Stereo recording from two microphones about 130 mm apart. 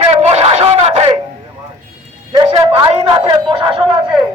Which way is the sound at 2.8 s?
50° right (ahead or behind).